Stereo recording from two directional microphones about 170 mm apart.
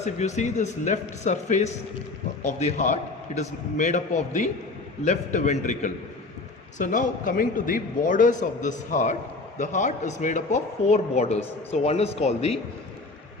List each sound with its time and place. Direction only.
0.0 s a man's voice: 45° left (ahead or behind)